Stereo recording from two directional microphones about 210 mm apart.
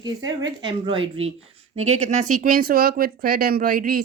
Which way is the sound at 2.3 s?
40° right (ahead or behind).